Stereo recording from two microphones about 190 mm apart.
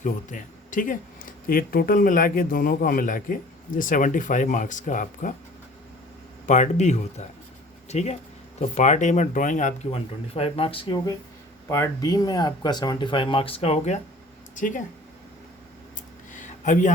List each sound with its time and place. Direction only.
0.0 s speech: 45° left (ahead or behind)
6.4 s speech: 40° left (ahead or behind)
16.3 s a sound: 40° left (ahead or behind)